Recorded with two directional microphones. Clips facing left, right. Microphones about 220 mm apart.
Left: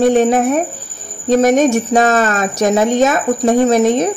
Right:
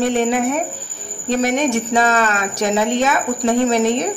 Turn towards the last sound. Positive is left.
turn(degrees=45)  # may be behind; listen again after turning